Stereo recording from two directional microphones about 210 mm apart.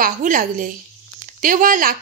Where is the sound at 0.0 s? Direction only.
40° right (ahead or behind).